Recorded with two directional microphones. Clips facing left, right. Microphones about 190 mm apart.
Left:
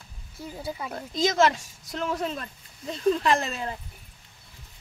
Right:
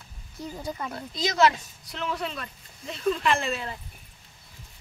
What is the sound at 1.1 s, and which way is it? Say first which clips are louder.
Speech: left 1 dB; 50° left (ahead or behind).